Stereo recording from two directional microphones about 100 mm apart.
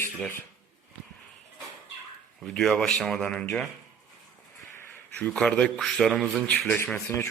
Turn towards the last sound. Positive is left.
turn(degrees=25)  # may be behind; listen again after turning